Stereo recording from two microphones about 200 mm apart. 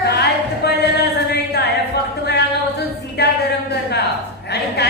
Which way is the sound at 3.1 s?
55° left (ahead or behind).